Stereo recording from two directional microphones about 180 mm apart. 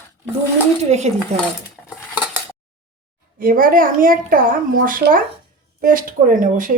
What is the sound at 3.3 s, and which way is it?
Speech, 50° right (ahead or behind).